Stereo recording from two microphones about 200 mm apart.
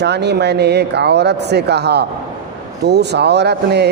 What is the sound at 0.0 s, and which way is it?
A man's voice, 55° right (ahead or behind).